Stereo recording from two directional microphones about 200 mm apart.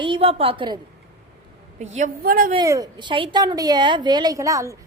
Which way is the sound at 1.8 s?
35° right (ahead or behind).